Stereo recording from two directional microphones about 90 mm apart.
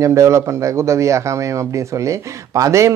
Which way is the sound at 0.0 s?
35° right (ahead or behind).